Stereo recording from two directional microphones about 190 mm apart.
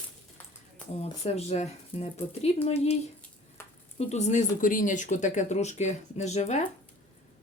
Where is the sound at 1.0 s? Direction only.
35° left (ahead or behind).